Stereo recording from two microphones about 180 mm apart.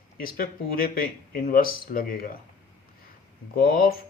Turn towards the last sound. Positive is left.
turn(degrees=55)  # may be behind; listen again after turning